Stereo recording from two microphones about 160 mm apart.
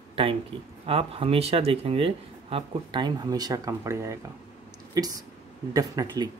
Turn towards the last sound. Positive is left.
turn(degrees=-25)  # may be behind; listen again after turning